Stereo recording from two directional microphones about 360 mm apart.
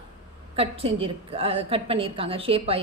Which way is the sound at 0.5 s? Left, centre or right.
Centre.